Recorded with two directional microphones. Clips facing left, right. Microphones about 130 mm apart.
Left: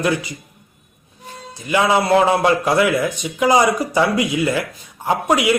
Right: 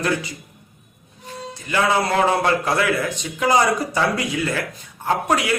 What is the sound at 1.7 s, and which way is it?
Speech, 15° left (ahead or behind).